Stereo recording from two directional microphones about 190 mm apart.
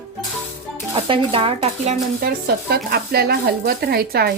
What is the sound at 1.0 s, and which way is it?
Speech, 30° right (ahead or behind).